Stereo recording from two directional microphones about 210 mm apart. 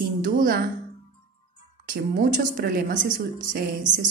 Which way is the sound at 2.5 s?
45° right (ahead or behind).